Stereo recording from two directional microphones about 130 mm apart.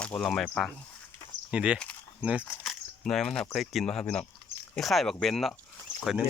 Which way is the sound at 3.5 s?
Centre (ahead or behind).